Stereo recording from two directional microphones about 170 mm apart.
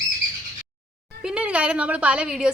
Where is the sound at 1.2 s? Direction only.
5° right (ahead or behind).